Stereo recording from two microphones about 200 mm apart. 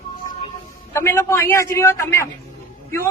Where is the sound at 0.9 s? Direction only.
15° left (ahead or behind).